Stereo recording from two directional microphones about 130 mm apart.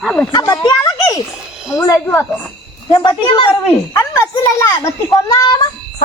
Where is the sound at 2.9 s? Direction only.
35° left (ahead or behind).